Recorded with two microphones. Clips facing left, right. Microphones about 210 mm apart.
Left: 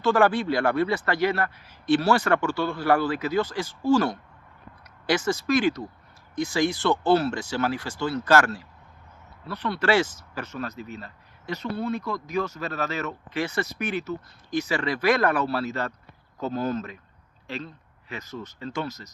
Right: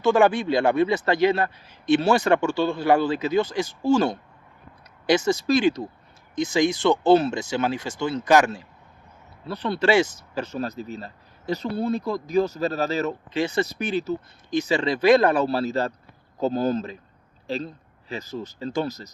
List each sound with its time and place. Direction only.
0.0 s speech: 20° right (ahead or behind)
5.5 s speech: 30° right (ahead or behind)
6.3 s speech: 15° right (ahead or behind)
9.5 s speech: 30° right (ahead or behind)
9.8 s speech: 15° right (ahead or behind)
10.4 s speech: 35° right (ahead or behind)
13.3 s speech: 20° right (ahead or behind)
13.7 s speech: 30° right (ahead or behind)